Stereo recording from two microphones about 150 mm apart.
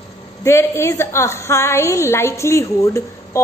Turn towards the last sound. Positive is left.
turn(degrees=20)  # may be behind; listen again after turning